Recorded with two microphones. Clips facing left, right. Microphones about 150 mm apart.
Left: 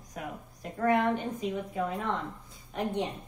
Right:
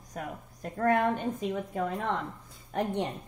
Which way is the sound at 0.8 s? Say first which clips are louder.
Even; 50° right (ahead or behind).